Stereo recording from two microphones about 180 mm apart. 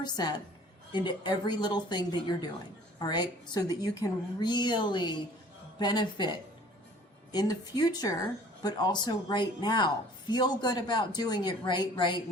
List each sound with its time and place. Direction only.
0.0 s speech: 25° left (ahead or behind)